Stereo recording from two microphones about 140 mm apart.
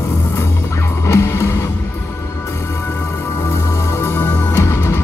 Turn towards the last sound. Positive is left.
turn(degrees=20)  # may be behind; listen again after turning